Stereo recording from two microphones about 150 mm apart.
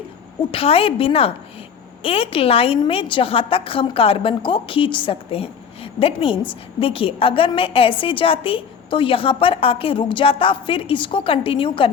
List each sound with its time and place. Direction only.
0.5 s a woman's voice: 40° left (ahead or behind)